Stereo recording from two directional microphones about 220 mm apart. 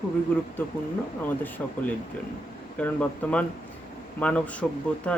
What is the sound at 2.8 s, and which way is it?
Speech, 5° left (ahead or behind).